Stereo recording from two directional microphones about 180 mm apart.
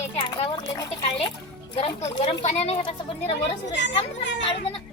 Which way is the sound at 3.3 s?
80° left.